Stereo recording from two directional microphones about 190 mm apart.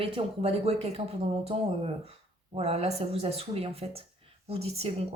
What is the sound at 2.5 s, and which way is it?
Speech, 30° right (ahead or behind).